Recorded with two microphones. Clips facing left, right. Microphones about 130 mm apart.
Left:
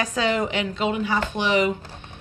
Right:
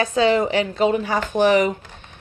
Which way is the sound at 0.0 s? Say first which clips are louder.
Right 6 dB; 30° right (ahead or behind).